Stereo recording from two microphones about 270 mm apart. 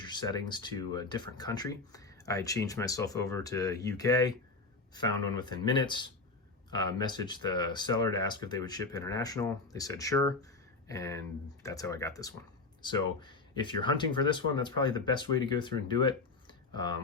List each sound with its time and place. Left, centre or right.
0.0 s speech: centre
5.4 s speech: centre